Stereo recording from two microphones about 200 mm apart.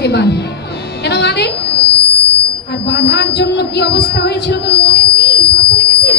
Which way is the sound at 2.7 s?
55° left (ahead or behind).